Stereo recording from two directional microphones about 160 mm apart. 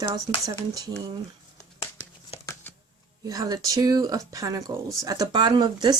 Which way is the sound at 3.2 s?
20° right (ahead or behind).